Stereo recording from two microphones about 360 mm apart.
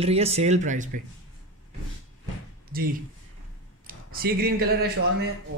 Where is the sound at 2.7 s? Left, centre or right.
Right.